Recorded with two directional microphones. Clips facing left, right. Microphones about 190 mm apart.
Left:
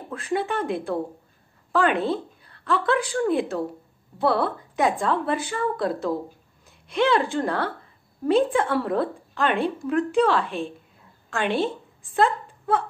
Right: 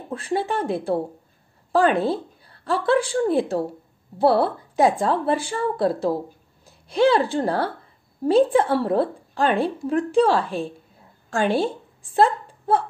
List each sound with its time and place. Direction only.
0.1 s a woman's voice: 30° right (ahead or behind)